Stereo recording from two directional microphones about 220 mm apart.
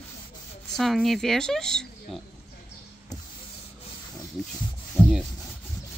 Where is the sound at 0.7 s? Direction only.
Centre (ahead or behind).